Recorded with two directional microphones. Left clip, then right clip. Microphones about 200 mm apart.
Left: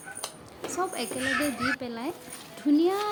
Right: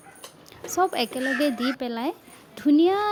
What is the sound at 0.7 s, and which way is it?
A woman's voice, 45° right (ahead or behind).